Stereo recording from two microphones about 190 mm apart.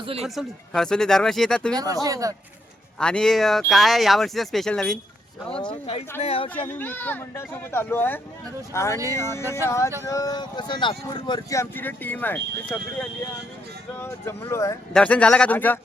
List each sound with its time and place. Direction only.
0.2 s speech: centre (ahead or behind)
1.7 s speech: 20° right (ahead or behind)
3.0 s speech: 5° left (ahead or behind)
5.8 s speech: 30° left (ahead or behind)
6.5 s speech: 10° left (ahead or behind)